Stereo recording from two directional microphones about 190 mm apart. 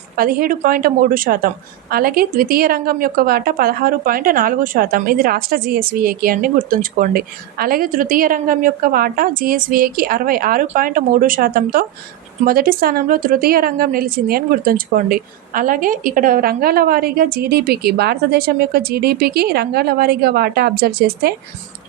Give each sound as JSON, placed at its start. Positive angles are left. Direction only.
{"t": 0.2, "sound": "a woman's voice", "side_deg": -50}